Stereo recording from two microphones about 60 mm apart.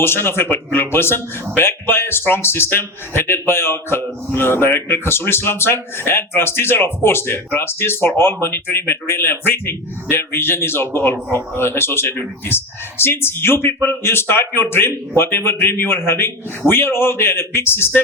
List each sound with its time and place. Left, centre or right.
0.0 s speech: left